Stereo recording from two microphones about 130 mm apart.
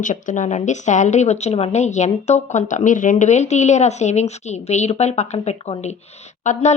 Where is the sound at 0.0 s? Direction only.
75° left (ahead or behind).